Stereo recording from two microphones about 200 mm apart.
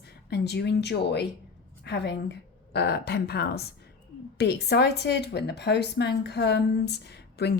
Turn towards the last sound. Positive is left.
turn(degrees=55)  # may be behind; listen again after turning